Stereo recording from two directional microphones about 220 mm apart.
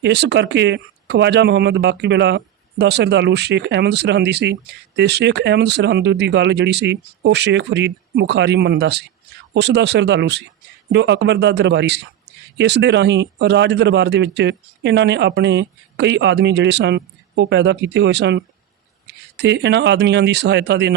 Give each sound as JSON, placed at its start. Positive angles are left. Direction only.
{"t": 0.0, "sound": "speech", "side_deg": -50}